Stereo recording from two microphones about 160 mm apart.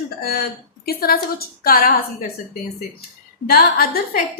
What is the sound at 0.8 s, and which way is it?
A woman's voice, 70° left (ahead or behind).